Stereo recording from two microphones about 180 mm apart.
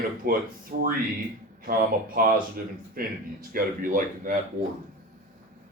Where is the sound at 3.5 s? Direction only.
50° right (ahead or behind).